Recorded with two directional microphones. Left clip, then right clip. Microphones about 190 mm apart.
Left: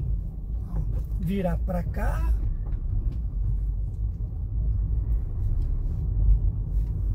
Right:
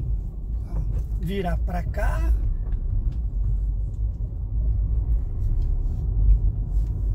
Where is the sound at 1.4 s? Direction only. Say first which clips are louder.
Even; 50° right (ahead or behind).